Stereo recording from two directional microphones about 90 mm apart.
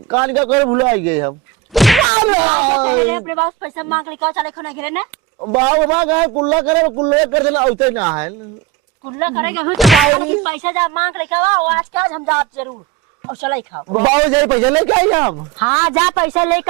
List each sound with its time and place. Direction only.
0.1 s speech: 20° right (ahead or behind)
1.7 s whack: centre (ahead or behind)
2.1 s speech: 15° right (ahead or behind)
9.7 s speech: centre (ahead or behind)
10.2 s speech: 15° right (ahead or behind)